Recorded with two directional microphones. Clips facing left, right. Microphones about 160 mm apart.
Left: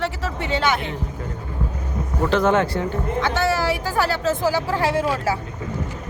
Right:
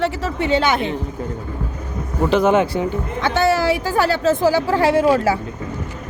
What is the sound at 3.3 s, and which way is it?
A woman's voice, 25° right (ahead or behind).